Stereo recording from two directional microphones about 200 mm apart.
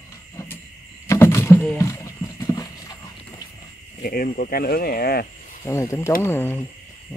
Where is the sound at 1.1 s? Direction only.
15° left (ahead or behind).